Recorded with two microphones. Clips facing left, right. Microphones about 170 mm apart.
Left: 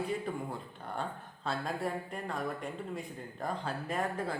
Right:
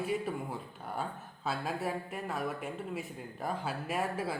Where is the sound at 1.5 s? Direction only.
5° right (ahead or behind).